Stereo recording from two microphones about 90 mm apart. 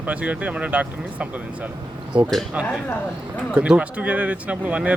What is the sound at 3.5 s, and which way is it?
Speech, 10° right (ahead or behind).